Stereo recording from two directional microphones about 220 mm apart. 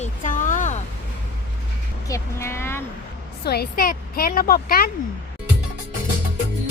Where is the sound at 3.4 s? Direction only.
45° left (ahead or behind).